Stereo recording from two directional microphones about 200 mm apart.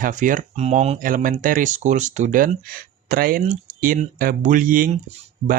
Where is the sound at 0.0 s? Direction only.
40° right (ahead or behind).